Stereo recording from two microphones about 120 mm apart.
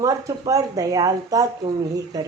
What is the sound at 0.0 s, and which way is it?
Speech, 30° right (ahead or behind).